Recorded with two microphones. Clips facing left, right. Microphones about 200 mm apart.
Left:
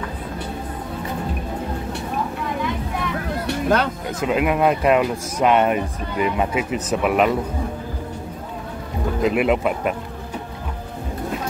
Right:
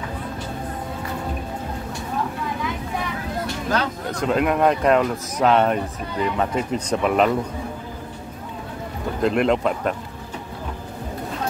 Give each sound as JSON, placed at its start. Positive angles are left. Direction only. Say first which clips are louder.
{"t": 3.4, "sound": "a sound", "louder": "left 5 dB", "side_deg": 60}
{"t": 4.1, "sound": "speech", "louder": "right 1 dB", "side_deg": 5}
{"t": 9.2, "sound": "speech", "louder": "even", "side_deg": 5}